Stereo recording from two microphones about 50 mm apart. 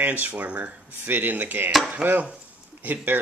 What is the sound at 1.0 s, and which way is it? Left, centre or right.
Speech, right.